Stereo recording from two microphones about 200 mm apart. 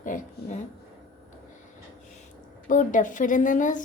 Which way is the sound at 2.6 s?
40° left (ahead or behind).